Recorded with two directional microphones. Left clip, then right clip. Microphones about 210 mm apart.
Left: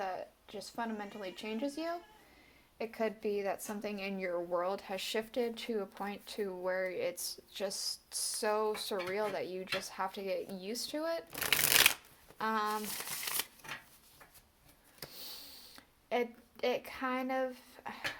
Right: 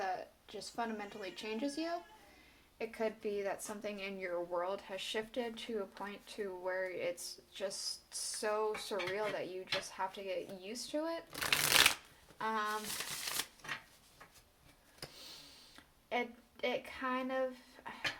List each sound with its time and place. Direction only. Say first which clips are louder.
0.0 s a woman's voice: even; 20° left (ahead or behind)
2.7 s speech: left 2 dB; 30° left (ahead or behind); by 11.2 s 45° left (ahead or behind)
11.3 s speech: even; 20° left (ahead or behind)
12.4 s speech: left 3 dB; 40° left (ahead or behind)
15.0 s a sound: left 3 dB; 35° left (ahead or behind)